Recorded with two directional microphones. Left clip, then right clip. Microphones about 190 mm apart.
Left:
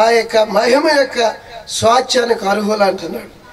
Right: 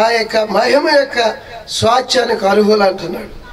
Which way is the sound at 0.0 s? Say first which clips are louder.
Left 1 dB; 45° left (ahead or behind).